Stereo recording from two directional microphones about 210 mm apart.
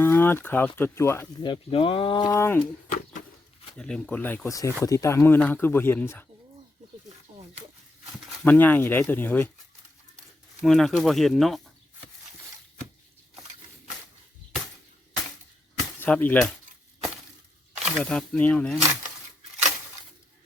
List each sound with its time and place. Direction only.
0.0 s speech: 10° left (ahead or behind)
3.8 s speech: 5° left (ahead or behind)
8.4 s speech: 10° left (ahead or behind)
10.6 s speech: centre (ahead or behind)
16.0 s speech: 10° left (ahead or behind)
17.9 s speech: 5° left (ahead or behind)